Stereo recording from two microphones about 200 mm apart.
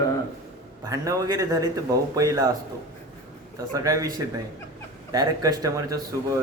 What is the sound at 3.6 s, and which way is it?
Speech, 15° right (ahead or behind).